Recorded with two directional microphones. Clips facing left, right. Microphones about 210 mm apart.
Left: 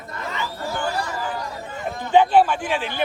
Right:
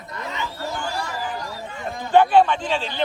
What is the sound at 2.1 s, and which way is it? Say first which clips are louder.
Speech: even; 5° left (ahead or behind).